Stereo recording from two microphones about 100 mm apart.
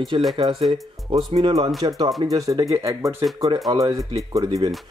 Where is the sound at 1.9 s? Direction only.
35° right (ahead or behind).